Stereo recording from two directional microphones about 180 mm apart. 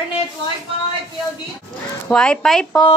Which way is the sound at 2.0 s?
5° left (ahead or behind).